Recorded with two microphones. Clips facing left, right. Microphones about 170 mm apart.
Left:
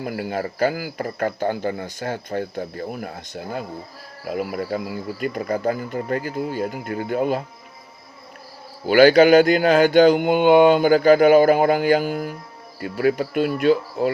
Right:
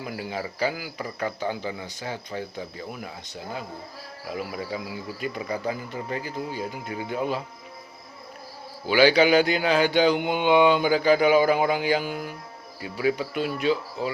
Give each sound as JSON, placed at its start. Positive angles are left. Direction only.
{"t": 0.0, "sound": "speech", "side_deg": 55}
{"t": 8.9, "sound": "speech", "side_deg": 50}